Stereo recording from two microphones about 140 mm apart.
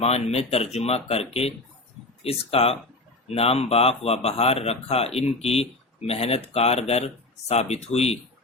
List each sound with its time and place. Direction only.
0.0 s speech: 50° left (ahead or behind)